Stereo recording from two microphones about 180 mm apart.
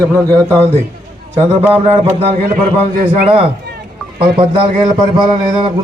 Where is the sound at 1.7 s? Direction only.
35° right (ahead or behind).